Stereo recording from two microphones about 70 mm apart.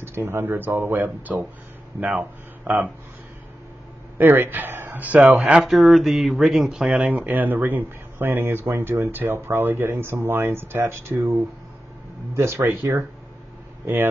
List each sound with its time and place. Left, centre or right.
0.0 s speech: right; by 2.9 s centre
4.2 s speech: right
5.6 s speech: centre
6.9 s speech: centre
7.2 s speech: right
9.1 s speech: right
12.4 s speech: right